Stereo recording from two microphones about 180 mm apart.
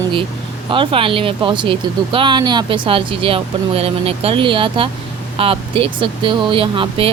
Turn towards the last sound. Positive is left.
turn(degrees=-30)  # may be behind; listen again after turning